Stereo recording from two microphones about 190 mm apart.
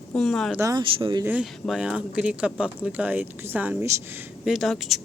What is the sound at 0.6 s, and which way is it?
Speech, 25° right (ahead or behind).